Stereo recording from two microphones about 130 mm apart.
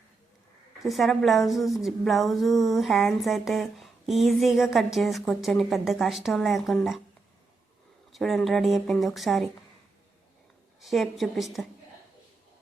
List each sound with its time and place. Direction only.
0.8 s speech: centre (ahead or behind)
8.1 s speech: 5° left (ahead or behind)
10.8 s speech: centre (ahead or behind)